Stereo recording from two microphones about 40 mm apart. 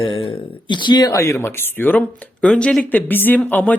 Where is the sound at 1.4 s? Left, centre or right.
Left.